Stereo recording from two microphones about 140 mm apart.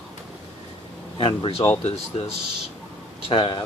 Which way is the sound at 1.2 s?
40° left (ahead or behind).